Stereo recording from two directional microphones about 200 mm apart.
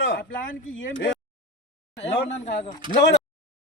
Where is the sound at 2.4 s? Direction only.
30° left (ahead or behind).